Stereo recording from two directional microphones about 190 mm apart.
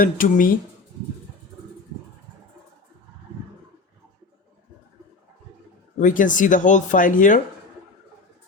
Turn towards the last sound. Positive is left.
turn(degrees=45)  # may be behind; listen again after turning